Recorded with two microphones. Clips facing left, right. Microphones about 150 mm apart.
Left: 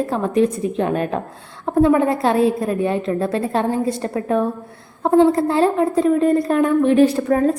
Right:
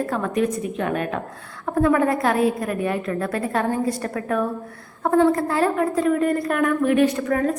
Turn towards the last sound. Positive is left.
turn(degrees=30)  # may be behind; listen again after turning